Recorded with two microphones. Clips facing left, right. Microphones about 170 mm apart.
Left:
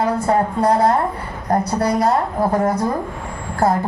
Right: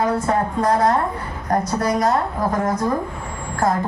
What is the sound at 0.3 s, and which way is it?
A woman's voice, 30° left (ahead or behind).